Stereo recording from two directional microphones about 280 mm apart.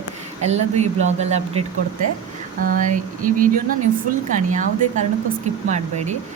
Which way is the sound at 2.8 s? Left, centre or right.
Right.